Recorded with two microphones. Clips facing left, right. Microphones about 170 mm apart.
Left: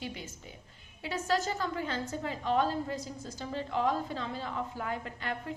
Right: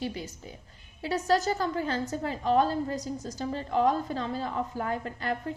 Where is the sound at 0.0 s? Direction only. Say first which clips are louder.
Right 6 dB; 35° right (ahead or behind).